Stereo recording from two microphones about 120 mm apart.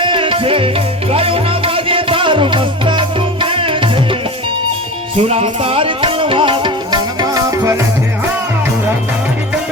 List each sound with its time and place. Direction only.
0.0 s music: 45° right (ahead or behind)
5.3 s music: 55° right (ahead or behind); by 7.8 s 25° right (ahead or behind)